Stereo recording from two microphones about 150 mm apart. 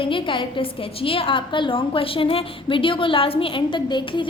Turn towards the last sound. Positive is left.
turn(degrees=30)  # may be behind; listen again after turning